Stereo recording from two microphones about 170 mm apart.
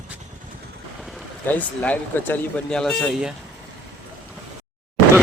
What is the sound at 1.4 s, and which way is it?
Speech, 10° left (ahead or behind).